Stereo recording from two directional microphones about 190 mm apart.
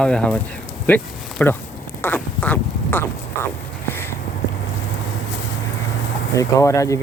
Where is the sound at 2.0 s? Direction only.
10° left (ahead or behind).